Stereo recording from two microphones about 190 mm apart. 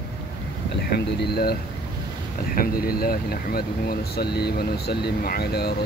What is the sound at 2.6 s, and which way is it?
Speech, 50° left (ahead or behind).